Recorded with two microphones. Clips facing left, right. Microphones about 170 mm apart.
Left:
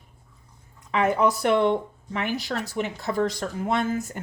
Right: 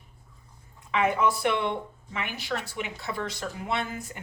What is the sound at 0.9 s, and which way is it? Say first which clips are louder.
Speech: left 3 dB; 40° left (ahead or behind).